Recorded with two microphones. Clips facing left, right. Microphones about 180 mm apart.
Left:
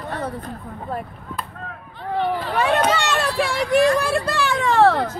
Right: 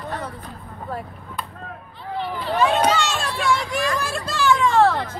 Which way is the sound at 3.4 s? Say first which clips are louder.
Left 5 dB; 60° left (ahead or behind).